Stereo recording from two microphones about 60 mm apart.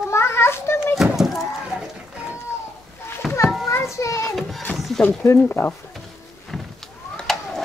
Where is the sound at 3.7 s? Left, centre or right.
Left.